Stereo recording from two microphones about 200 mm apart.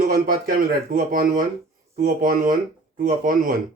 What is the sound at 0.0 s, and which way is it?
Speech, 45° right (ahead or behind).